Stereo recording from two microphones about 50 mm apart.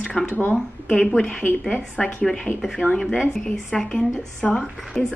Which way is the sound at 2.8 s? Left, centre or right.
Centre.